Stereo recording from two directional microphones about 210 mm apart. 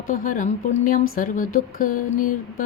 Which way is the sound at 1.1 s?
40° left (ahead or behind).